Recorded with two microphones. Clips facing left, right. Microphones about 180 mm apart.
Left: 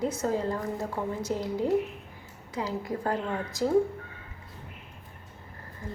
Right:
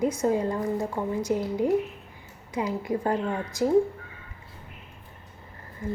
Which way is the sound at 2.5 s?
20° right (ahead or behind).